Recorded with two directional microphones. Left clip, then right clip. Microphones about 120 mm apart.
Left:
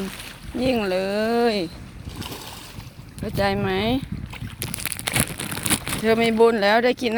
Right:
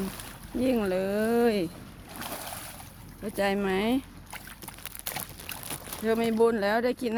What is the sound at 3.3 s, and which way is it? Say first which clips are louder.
Speech: left 5 dB; 5° right (ahead or behind).